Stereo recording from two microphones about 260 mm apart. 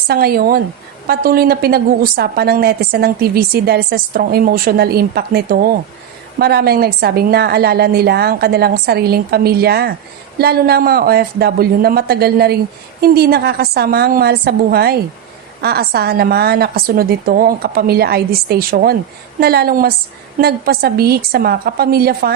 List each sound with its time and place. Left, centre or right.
0.1 s a woman's voice: right